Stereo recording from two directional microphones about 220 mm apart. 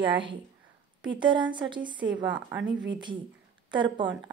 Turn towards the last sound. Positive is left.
turn(degrees=-20)  # may be behind; listen again after turning